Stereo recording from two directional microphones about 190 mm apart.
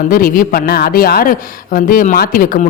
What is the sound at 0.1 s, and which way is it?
Speech, 45° left (ahead or behind).